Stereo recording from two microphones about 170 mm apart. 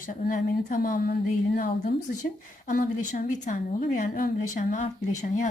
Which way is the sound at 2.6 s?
50° left (ahead or behind).